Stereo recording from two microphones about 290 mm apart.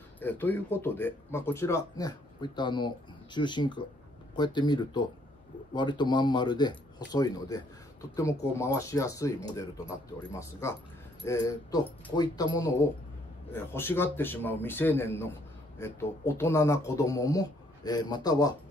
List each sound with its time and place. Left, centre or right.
0.2 s speech: centre
11.2 s speech: centre